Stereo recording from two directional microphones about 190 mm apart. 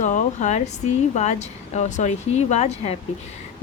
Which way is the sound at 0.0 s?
40° left (ahead or behind).